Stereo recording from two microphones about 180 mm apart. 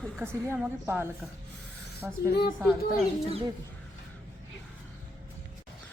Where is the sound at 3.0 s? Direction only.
35° right (ahead or behind).